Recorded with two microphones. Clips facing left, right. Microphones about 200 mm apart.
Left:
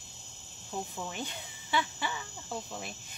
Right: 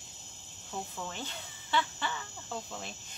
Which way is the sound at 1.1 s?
15° left (ahead or behind).